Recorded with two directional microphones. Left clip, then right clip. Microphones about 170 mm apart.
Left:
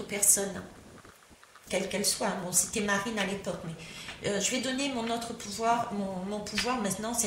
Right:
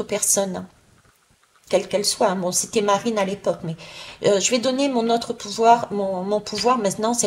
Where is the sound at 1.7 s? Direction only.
30° right (ahead or behind).